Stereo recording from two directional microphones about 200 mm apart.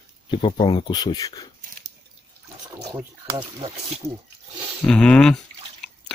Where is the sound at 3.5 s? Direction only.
30° right (ahead or behind).